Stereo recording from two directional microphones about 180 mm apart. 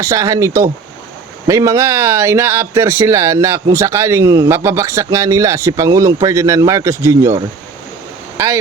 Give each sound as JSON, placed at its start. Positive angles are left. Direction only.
{"t": 0.0, "sound": "speech", "side_deg": -20}